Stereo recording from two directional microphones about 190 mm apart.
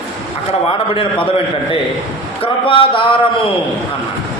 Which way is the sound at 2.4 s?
30° left (ahead or behind).